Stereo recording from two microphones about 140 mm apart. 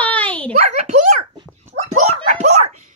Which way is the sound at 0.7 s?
60° right (ahead or behind).